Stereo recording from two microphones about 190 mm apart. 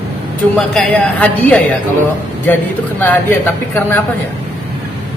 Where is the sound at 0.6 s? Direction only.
5° left (ahead or behind).